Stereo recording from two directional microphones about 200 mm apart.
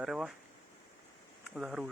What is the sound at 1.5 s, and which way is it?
Speech, 5° right (ahead or behind).